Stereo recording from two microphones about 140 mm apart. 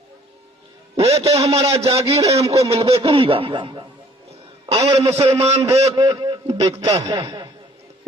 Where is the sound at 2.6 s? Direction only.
45° right (ahead or behind).